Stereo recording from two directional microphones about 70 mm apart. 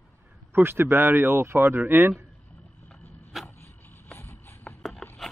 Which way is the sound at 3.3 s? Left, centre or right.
Centre.